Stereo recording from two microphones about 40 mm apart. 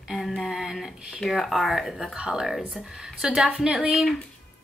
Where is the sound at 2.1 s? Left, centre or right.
Centre.